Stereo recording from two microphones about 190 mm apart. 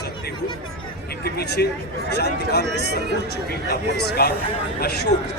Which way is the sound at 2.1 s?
60° left (ahead or behind).